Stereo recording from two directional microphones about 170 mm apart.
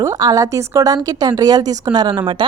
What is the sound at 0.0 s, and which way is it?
A woman's voice, 20° right (ahead or behind).